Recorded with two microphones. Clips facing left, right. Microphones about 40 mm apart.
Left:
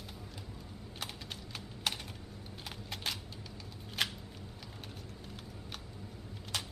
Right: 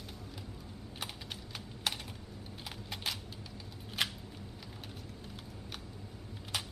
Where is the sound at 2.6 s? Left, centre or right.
Centre.